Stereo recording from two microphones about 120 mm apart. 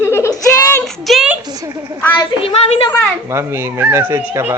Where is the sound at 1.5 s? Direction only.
30° right (ahead or behind).